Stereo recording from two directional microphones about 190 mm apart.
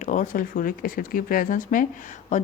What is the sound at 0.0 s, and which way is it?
Speech, 40° left (ahead or behind).